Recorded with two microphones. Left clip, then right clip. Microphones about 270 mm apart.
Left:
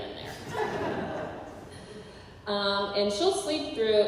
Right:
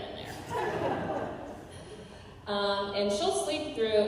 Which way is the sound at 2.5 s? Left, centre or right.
Left.